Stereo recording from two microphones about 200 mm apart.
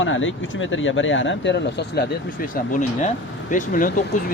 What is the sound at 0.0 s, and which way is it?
Speech, 75° left (ahead or behind).